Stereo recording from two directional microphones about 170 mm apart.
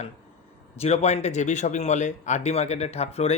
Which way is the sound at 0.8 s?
40° left (ahead or behind).